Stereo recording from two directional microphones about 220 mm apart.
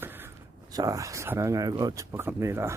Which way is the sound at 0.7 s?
15° right (ahead or behind).